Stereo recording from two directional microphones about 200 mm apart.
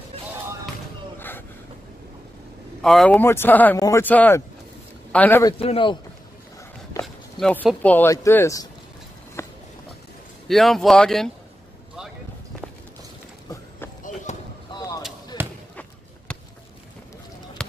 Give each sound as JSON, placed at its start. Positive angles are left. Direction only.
{"t": 2.8, "sound": "speech", "side_deg": 0}
{"t": 5.5, "sound": "a man's voice", "side_deg": 25}
{"t": 7.0, "sound": "speech", "side_deg": 5}
{"t": 9.4, "sound": "a sound", "side_deg": 10}
{"t": 10.5, "sound": "speech", "side_deg": 0}
{"t": 14.3, "sound": "basketball bounce", "side_deg": 35}
{"t": 14.7, "sound": "a sound", "side_deg": 20}
{"t": 15.7, "sound": "basketball bounce", "side_deg": 5}
{"t": 17.6, "sound": "basketball bounce", "side_deg": 5}